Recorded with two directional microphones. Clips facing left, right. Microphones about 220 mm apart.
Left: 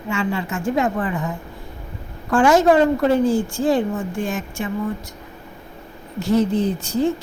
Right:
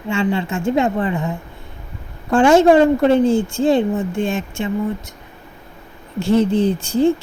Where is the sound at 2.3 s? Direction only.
25° right (ahead or behind).